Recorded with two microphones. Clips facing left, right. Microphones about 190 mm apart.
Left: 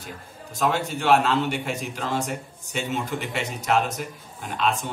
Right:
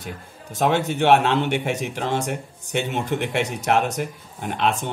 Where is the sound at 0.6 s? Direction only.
55° right (ahead or behind).